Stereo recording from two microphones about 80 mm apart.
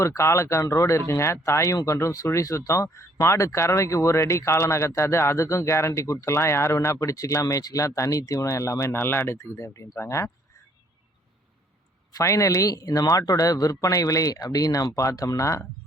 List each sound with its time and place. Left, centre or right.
0.0 s speech: left
12.1 s speech: left